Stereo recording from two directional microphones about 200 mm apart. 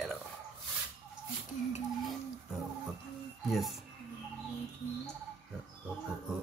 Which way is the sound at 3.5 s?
Centre (ahead or behind).